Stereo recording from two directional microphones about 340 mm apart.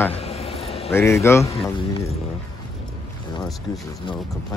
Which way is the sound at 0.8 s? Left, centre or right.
Centre.